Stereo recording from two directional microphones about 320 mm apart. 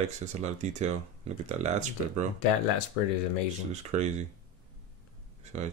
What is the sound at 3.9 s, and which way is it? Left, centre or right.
Speech, right.